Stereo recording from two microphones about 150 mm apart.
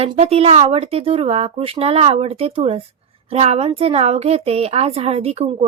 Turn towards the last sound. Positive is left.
turn(degrees=-45)  # may be behind; listen again after turning